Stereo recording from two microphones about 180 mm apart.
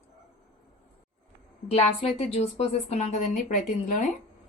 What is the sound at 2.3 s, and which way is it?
Speech, 35° left (ahead or behind).